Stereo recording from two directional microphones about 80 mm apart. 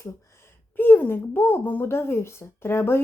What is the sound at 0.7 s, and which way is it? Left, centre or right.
A woman's voice, left.